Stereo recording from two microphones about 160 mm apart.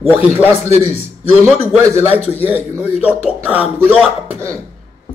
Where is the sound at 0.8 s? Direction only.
40° left (ahead or behind).